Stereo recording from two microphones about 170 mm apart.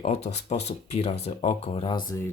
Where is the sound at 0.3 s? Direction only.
40° left (ahead or behind).